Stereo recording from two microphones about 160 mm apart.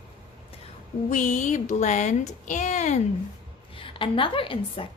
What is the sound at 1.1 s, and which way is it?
Speech, 50° left (ahead or behind).